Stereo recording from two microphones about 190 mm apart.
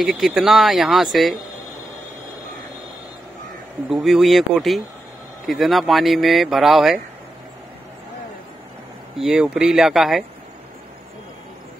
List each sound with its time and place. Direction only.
0.0 s speech: centre (ahead or behind)
3.9 s speech: centre (ahead or behind)
9.1 s speech: centre (ahead or behind)